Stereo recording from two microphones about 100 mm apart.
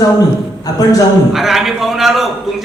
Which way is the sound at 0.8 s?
35° left (ahead or behind).